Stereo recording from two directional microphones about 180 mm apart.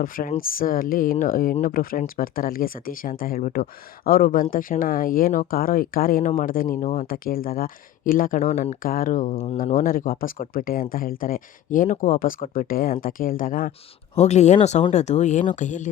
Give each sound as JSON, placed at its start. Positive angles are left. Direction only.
{"t": 0.0, "sound": "speech", "side_deg": 50}
{"t": 14.2, "sound": "speech", "side_deg": 40}